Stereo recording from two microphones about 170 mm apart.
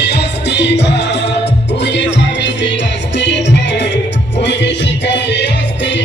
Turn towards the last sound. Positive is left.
turn(degrees=90)